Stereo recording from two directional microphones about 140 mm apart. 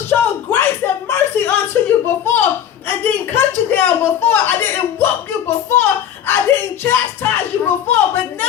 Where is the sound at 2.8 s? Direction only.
15° left (ahead or behind).